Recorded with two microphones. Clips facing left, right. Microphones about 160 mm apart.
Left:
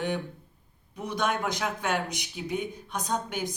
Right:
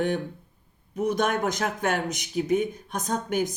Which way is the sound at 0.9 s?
45° right (ahead or behind).